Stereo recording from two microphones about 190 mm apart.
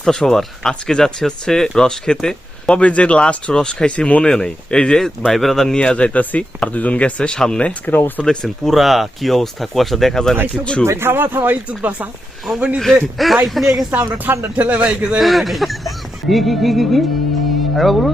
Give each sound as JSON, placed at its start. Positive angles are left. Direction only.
{"t": 0.0, "sound": "speech", "side_deg": 0}
{"t": 10.8, "sound": "speech", "side_deg": -15}
{"t": 14.0, "sound": "speech", "side_deg": -15}